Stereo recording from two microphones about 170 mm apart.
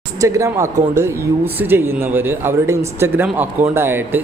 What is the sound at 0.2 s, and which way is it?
Speech, 20° right (ahead or behind).